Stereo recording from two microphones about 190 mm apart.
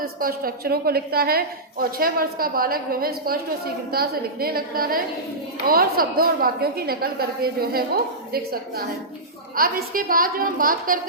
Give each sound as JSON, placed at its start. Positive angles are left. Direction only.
{"t": 0.0, "sound": "a woman's voice", "side_deg": -50}